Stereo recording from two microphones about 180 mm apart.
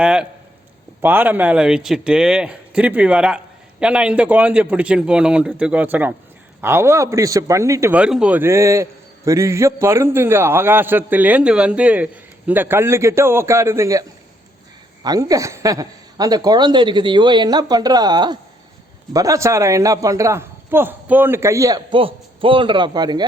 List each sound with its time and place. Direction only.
0.0 s a man's voice: 5° right (ahead or behind)
15.0 s a woman's voice: 20° right (ahead or behind)